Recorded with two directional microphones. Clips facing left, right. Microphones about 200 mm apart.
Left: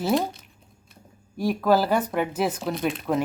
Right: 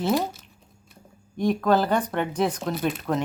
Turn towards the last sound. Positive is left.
turn(degrees=10)  # may be behind; listen again after turning